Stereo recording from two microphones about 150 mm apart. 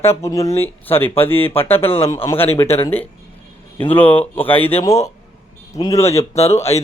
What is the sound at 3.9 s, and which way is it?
Speech, 10° left (ahead or behind).